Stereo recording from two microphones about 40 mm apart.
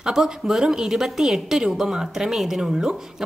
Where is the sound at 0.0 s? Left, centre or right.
Centre.